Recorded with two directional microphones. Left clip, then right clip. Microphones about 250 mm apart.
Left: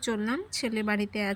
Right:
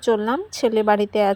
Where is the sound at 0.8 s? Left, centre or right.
Right.